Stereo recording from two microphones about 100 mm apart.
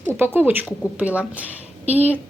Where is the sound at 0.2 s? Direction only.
20° right (ahead or behind).